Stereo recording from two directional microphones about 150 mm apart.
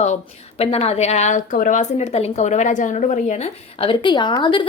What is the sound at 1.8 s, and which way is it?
Speech, 45° left (ahead or behind).